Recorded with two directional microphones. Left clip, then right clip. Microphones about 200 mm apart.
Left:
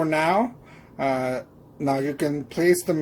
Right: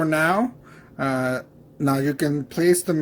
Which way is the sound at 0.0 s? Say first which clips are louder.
Right 1 dB; 25° right (ahead or behind).